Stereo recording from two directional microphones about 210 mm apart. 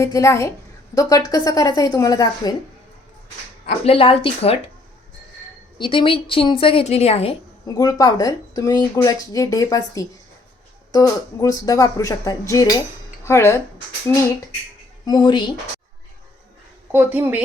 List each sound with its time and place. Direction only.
0.0 s speech: 15° left (ahead or behind)
3.8 s speech: 25° left (ahead or behind)
5.7 s speech: 25° left (ahead or behind)
7.8 s speech: 15° left (ahead or behind)
16.9 s a woman's voice: 10° right (ahead or behind)